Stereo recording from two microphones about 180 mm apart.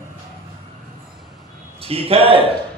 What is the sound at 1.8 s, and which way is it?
Speech, 30° right (ahead or behind).